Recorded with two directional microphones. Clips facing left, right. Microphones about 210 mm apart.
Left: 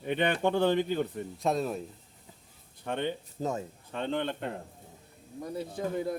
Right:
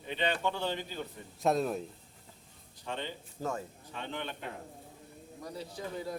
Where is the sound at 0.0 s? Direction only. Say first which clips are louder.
Left 5 dB; 55° left (ahead or behind).